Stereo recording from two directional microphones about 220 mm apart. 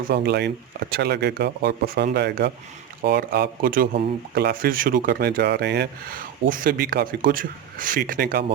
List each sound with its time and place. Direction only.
0.1 s speech: 50° right (ahead or behind)